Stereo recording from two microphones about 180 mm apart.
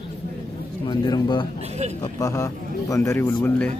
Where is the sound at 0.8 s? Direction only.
25° left (ahead or behind).